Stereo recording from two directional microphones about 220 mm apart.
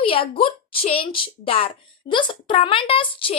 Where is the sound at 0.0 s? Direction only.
25° left (ahead or behind).